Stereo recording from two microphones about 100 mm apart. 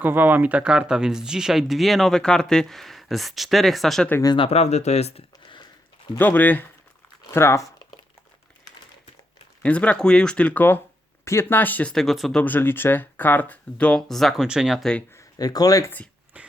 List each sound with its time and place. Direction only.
0.0 s speech: 20° right (ahead or behind); by 4.1 s centre (ahead or behind)
4.4 s speech: 85° left
6.1 s speech: 20° left (ahead or behind)
7.3 s speech: 30° left (ahead or behind)
9.6 s speech: 10° left (ahead or behind)
12.4 s speech: 20° left (ahead or behind); by 14.8 s 5° right (ahead or behind)
15.1 s speech: 35° left (ahead or behind)
16.4 s a sound: 15° right (ahead or behind)